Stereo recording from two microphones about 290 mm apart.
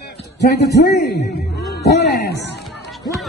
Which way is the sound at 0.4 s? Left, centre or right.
Left.